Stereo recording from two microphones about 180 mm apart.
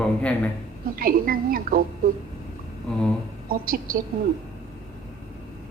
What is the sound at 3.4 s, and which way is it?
Speech, 55° right (ahead or behind).